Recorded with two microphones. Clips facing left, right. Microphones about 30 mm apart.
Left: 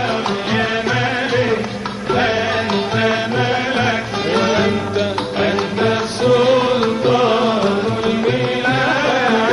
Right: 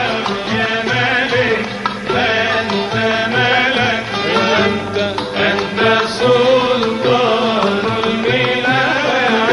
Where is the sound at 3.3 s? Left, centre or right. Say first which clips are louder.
Right 4 dB; right.